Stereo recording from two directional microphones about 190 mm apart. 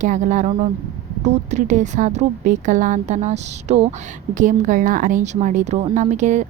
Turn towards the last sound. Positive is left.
turn(degrees=-40)  # may be behind; listen again after turning